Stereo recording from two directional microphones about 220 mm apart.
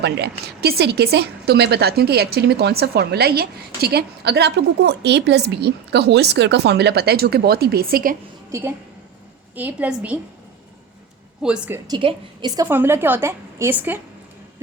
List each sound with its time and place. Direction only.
0.0 s a woman's voice: 50° right (ahead or behind)
9.6 s a woman's voice: 5° right (ahead or behind)
11.4 s a woman's voice: 5° right (ahead or behind)
11.9 s a woman's voice: 20° right (ahead or behind)